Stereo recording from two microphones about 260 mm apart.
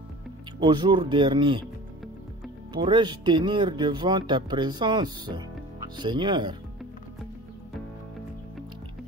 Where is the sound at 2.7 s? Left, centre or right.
Centre.